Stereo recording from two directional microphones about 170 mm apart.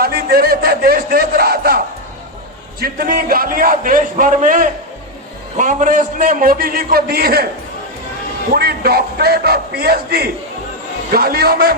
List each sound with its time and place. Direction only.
0.0 s a sound: 65° right (ahead or behind)
2.8 s a man's voice: 60° right (ahead or behind)
8.5 s a man's voice: 65° right (ahead or behind)